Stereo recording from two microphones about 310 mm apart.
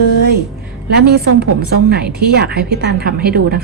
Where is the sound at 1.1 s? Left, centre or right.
Right.